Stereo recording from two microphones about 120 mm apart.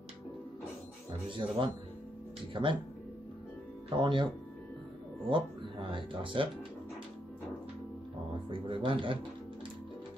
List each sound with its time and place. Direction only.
1.3 s speech: 45° right (ahead or behind)
3.9 s speech: 45° right (ahead or behind)
5.3 s speech: 45° right (ahead or behind)
8.5 s speech: 45° right (ahead or behind)